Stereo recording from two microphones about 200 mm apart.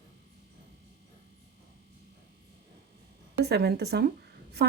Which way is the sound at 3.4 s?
55° right (ahead or behind).